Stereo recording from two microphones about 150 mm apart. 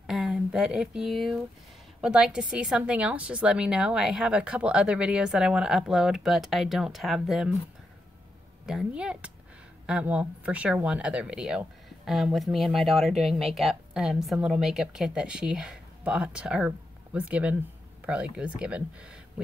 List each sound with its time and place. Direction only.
0.0 s speech: centre (ahead or behind)
8.6 s speech: 5° right (ahead or behind)